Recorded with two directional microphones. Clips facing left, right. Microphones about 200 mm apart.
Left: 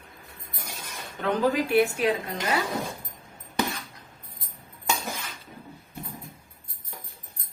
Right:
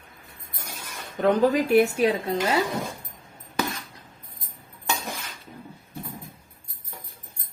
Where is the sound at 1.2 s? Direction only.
45° right (ahead or behind).